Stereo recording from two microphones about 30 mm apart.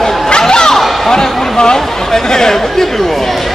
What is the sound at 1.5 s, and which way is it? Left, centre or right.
Speech, left.